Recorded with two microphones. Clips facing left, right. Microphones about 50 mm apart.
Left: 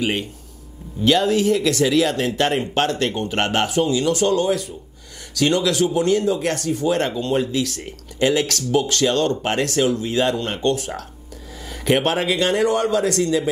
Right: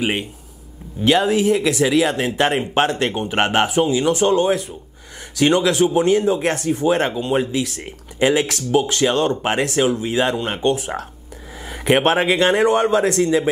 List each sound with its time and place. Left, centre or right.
0.0 s speech: right